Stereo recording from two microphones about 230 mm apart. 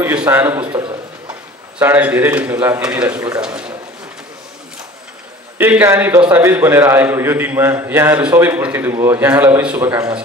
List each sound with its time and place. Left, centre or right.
0.0 s a man's voice: centre
0.7 s a man's voice: centre
1.8 s a man's voice: centre
5.6 s a man's voice: centre